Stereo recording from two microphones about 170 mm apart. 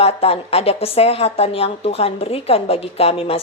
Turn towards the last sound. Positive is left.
turn(degrees=35)  # may be behind; listen again after turning